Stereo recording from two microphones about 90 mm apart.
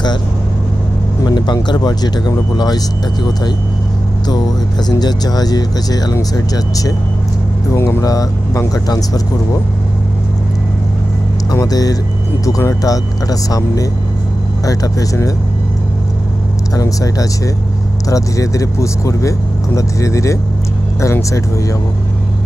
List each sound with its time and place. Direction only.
1.2 s speech: 55° left (ahead or behind)
4.8 s speech: 50° left (ahead or behind)
7.7 s speech: 30° left (ahead or behind)
8.0 s speech: 40° left (ahead or behind)
11.6 s speech: 45° left (ahead or behind)
16.7 s speech: 40° left (ahead or behind)